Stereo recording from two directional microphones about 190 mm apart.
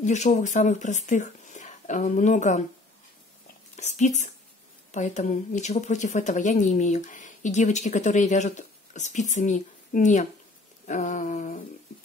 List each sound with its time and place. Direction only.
0.0 s speech: 40° left (ahead or behind)
3.7 s speech: 40° left (ahead or behind)
10.9 s a sound: 40° left (ahead or behind)